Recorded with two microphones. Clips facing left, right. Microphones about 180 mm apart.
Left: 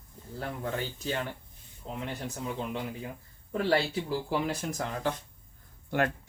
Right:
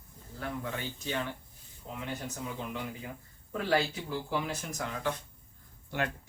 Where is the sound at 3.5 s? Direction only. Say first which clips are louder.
Left 2 dB; 35° left (ahead or behind).